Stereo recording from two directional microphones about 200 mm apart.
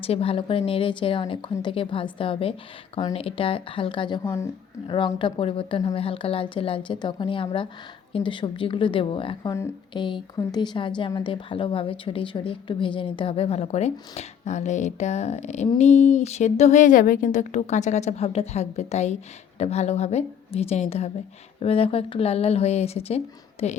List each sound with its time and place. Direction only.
0.0 s a woman's voice: 30° left (ahead or behind)
4.2 s speech: 15° left (ahead or behind)
4.9 s a woman's voice: 25° left (ahead or behind)